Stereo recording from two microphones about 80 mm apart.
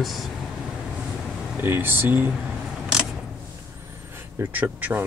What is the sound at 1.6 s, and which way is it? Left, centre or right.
Speech, right.